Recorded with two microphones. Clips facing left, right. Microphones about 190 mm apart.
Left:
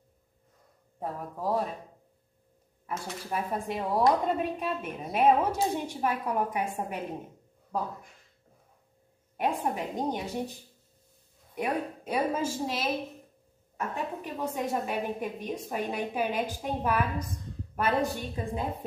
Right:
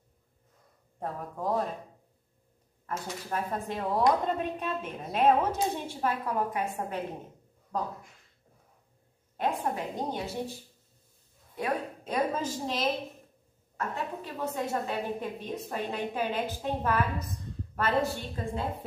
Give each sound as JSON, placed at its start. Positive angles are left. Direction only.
{"t": 0.9, "sound": "a man's voice", "side_deg": 5}
{"t": 3.3, "sound": "a woman's voice", "side_deg": 10}
{"t": 9.4, "sound": "a woman's voice", "side_deg": 15}
{"t": 11.5, "sound": "a woman's voice", "side_deg": 10}